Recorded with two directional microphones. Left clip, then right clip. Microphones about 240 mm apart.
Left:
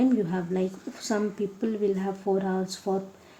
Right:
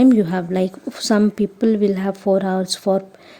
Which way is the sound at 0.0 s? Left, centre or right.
Right.